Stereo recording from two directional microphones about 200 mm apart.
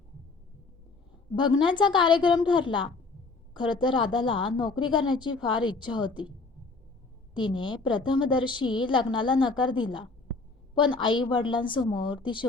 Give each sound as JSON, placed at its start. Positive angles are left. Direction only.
{"t": 1.4, "sound": "a woman's voice", "side_deg": 25}
{"t": 7.3, "sound": "a woman's voice", "side_deg": 25}